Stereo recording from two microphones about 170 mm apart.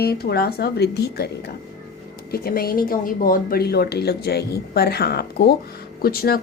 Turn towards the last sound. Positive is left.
turn(degrees=60)  # may be behind; listen again after turning